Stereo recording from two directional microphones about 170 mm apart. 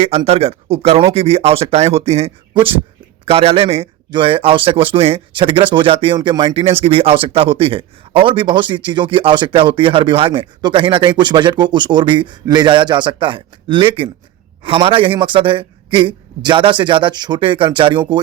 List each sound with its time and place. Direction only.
0.0 s a man's voice: 35° right (ahead or behind)